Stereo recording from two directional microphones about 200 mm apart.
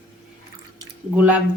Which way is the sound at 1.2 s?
5° right (ahead or behind).